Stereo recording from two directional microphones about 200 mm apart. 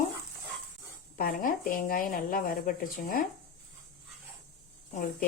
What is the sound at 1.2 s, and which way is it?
A woman's voice, 45° left (ahead or behind).